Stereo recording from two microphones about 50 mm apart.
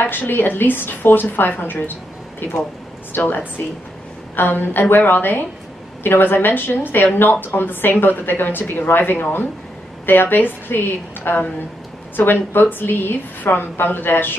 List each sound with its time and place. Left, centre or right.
0.0 s a woman's voice: left
4.4 s a woman's voice: left